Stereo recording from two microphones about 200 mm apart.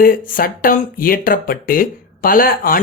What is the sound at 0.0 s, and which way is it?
Speech, 45° left (ahead or behind).